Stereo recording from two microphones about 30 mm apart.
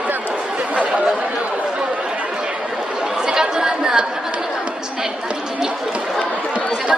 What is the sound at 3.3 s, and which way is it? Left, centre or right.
Chatter, right.